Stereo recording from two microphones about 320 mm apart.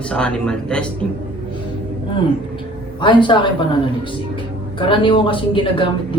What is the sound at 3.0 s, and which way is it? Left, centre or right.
Speech, centre.